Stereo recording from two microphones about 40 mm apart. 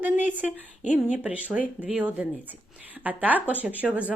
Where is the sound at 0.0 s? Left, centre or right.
Right.